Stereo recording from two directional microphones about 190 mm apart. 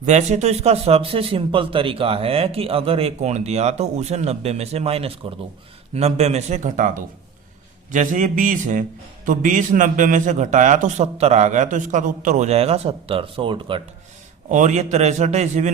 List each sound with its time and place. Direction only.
0.0 s speech: 40° right (ahead or behind)
14.5 s speech: 40° right (ahead or behind)